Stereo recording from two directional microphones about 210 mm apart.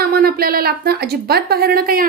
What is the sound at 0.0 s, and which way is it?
A woman's voice, 45° right (ahead or behind).